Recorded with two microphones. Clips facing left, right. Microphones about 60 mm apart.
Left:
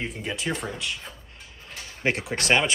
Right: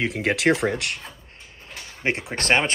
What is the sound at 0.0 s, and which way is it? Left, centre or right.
Speech, right.